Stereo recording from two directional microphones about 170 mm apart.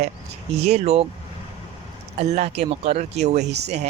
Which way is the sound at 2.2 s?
40° right (ahead or behind).